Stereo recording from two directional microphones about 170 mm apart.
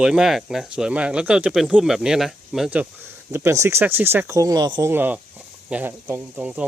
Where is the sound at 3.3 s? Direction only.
15° right (ahead or behind).